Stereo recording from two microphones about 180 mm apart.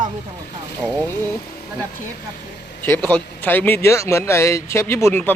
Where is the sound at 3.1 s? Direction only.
10° left (ahead or behind).